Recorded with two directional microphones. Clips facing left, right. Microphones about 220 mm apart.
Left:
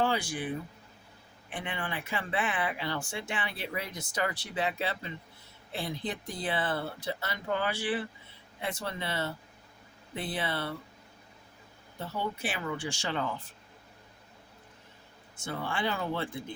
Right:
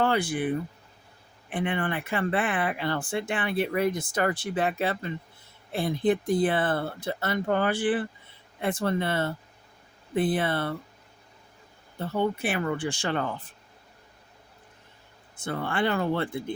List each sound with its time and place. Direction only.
0.0 s speech: 60° right (ahead or behind)
11.9 s speech: 55° right (ahead or behind)
15.4 s speech: 55° right (ahead or behind)